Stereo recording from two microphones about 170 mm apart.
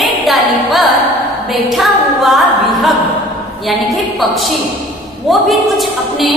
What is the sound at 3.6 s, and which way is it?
A woman's voice, centre (ahead or behind).